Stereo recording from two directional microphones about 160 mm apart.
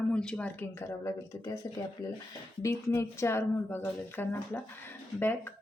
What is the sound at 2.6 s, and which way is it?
Speech, 20° left (ahead or behind).